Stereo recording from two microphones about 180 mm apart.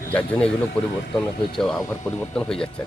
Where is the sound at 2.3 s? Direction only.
5° left (ahead or behind).